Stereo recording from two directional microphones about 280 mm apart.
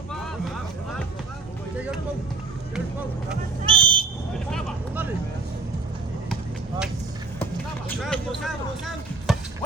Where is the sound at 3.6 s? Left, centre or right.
Centre.